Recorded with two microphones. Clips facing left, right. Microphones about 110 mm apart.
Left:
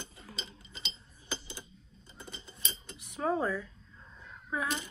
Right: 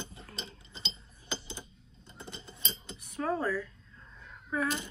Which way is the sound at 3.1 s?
20° left (ahead or behind).